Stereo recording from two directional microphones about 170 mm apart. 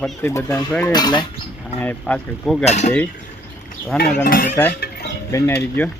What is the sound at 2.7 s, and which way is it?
Speech, 40° left (ahead or behind).